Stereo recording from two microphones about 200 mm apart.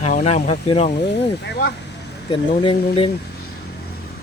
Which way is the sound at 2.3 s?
25° left (ahead or behind).